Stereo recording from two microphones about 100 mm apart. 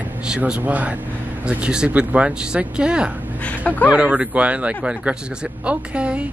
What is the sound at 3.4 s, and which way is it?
Speech, 15° left (ahead or behind).